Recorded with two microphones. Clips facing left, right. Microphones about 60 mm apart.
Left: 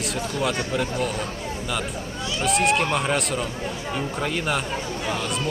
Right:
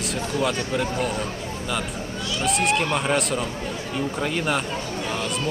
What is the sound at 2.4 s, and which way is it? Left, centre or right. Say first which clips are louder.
Speech: left 1 dB; centre.